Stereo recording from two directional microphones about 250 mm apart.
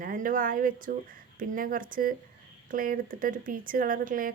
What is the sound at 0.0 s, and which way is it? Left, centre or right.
Speech, right.